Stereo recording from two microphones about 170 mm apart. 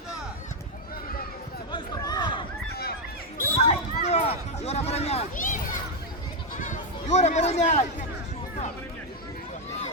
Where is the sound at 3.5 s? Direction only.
40° left (ahead or behind).